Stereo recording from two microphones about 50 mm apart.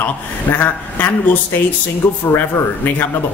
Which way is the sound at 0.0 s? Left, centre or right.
Left.